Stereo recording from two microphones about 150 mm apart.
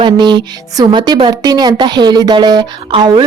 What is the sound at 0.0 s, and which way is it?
Speech, 30° right (ahead or behind).